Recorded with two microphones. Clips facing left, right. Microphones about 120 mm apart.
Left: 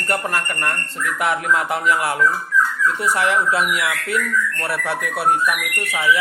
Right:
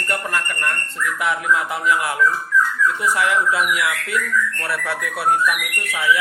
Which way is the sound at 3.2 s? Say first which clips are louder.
Left 1 dB; 30° left (ahead or behind).